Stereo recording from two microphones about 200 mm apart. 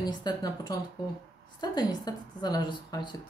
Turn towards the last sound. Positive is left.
turn(degrees=20)  # may be behind; listen again after turning